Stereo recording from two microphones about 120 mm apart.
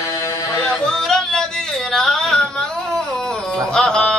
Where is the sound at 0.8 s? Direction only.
5° left (ahead or behind).